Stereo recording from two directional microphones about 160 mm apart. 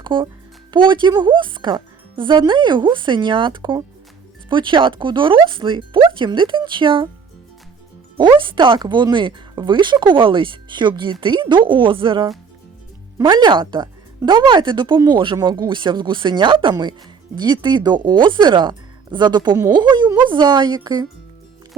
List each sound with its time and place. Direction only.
0.0 s speech: 30° right (ahead or behind)
8.2 s speech: 30° right (ahead or behind)